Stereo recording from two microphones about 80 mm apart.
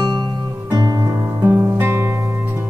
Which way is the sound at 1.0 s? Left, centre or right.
Right.